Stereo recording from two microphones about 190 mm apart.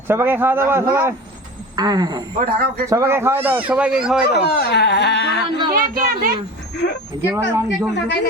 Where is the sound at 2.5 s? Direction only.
50° right (ahead or behind).